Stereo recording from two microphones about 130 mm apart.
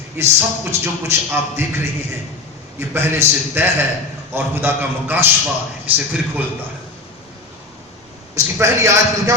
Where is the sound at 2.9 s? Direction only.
15° right (ahead or behind).